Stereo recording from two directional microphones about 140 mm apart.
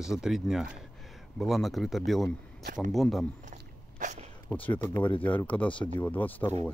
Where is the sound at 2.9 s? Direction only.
Centre (ahead or behind).